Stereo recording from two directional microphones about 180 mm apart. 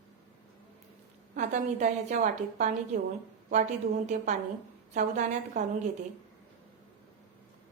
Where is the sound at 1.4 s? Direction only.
40° right (ahead or behind).